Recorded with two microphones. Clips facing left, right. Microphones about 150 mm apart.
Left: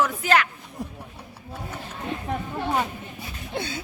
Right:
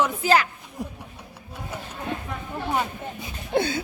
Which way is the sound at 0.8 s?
Centre (ahead or behind).